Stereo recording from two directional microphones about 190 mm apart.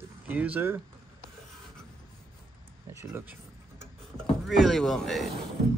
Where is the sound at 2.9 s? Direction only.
10° right (ahead or behind).